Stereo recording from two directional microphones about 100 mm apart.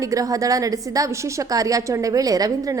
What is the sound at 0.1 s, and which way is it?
A woman's voice, 35° right (ahead or behind).